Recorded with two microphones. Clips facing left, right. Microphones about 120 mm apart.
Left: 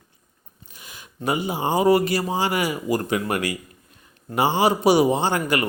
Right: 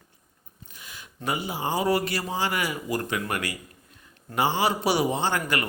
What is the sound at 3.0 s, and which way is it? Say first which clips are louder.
A man's voice: left 5 dB; 25° left (ahead or behind).